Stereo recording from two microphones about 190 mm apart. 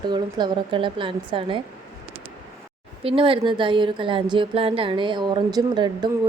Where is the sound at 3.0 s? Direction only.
30° right (ahead or behind).